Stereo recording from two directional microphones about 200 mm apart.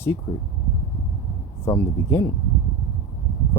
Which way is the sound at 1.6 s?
15° left (ahead or behind).